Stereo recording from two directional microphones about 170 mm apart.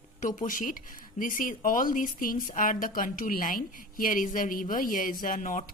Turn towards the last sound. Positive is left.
turn(degrees=50)  # may be behind; listen again after turning